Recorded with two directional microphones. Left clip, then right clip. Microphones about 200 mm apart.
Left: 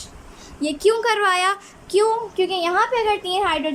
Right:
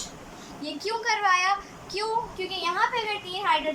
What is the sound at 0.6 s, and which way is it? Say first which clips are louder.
A woman's voice: left 11 dB; 65° left (ahead or behind).